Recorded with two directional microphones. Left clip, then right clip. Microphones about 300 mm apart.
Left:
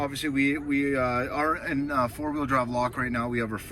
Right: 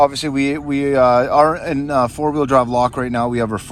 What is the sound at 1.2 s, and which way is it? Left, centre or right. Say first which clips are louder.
Speech: right 13 dB; centre.